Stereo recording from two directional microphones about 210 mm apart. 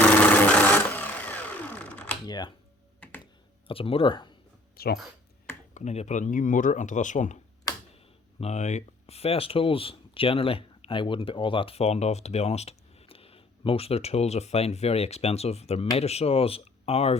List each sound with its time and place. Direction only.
0.0 s a sound: 10° left (ahead or behind)
2.2 s a sound: 20° left (ahead or behind)
3.7 s speech: 25° left (ahead or behind)
4.8 s speech: 45° left (ahead or behind)
5.7 s speech: 30° left (ahead or behind)
8.4 s speech: 30° left (ahead or behind)